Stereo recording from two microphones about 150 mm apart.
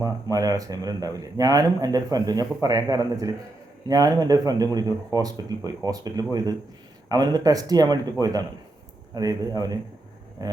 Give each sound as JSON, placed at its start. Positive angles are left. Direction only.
{"t": 0.0, "sound": "speech", "side_deg": -25}